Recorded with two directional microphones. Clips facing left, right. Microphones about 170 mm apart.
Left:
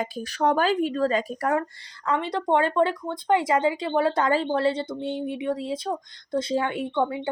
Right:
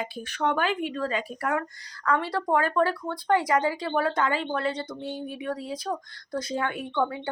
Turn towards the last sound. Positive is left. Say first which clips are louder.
# left 3 dB
turn(degrees=25)  # may be behind; listen again after turning